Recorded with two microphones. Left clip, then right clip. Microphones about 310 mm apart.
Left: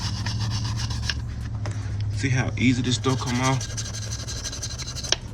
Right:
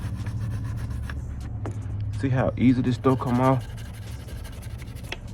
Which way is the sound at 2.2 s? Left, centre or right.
Centre.